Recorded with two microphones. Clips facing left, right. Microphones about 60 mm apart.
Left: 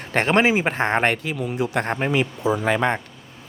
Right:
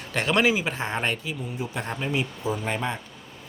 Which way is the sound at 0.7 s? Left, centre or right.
Left.